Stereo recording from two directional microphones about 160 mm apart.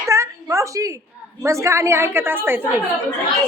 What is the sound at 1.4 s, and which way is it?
Female singing, 20° right (ahead or behind).